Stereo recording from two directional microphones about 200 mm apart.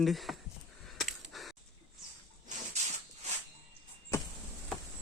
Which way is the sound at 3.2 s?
35° right (ahead or behind).